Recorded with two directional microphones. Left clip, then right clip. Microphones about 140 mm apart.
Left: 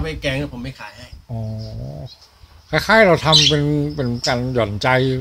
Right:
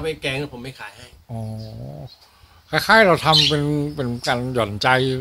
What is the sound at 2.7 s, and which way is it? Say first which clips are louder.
Speech: left 1 dB; 10° right (ahead or behind).